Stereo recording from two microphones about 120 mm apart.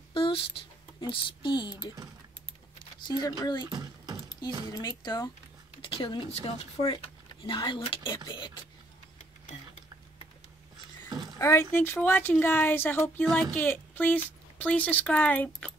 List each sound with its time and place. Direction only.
0.1 s speech: 45° left (ahead or behind)
3.1 s speech: 35° left (ahead or behind)
3.7 s a sound: 35° right (ahead or behind)
4.7 s speech: 35° left (ahead or behind)
5.8 s speech: 50° left (ahead or behind)
6.8 s speech: 60° left (ahead or behind)
7.4 s speech: 45° left (ahead or behind)
11.1 s a sound: 35° right (ahead or behind)
11.3 s speech: 25° left (ahead or behind)